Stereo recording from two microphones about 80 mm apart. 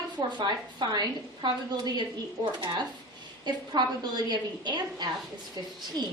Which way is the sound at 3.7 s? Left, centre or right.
Right.